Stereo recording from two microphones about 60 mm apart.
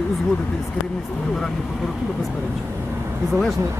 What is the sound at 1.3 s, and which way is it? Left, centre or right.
Speech, centre.